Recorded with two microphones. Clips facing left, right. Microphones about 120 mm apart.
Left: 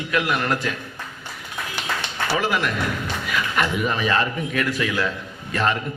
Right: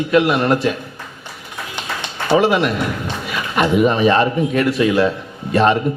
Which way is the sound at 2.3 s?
20° right (ahead or behind).